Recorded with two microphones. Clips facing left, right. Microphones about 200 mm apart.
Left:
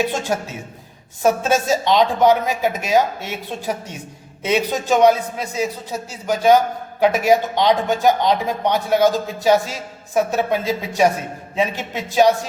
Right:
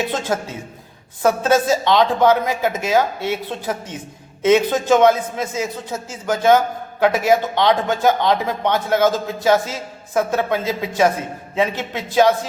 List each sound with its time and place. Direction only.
0.1 s speech: 15° left (ahead or behind)
4.4 s speech: 15° left (ahead or behind)